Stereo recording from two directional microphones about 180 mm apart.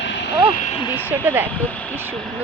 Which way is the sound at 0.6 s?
35° left (ahead or behind).